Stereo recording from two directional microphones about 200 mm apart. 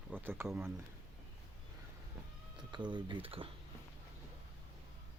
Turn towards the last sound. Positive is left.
turn(degrees=-30)  # may be behind; listen again after turning